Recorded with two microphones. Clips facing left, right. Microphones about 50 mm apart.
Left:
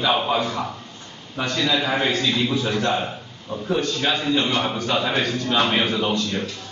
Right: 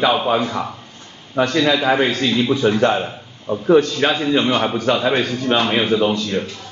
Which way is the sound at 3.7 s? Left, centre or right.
Right.